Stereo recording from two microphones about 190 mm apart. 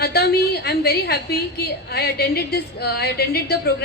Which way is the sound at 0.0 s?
55° left (ahead or behind).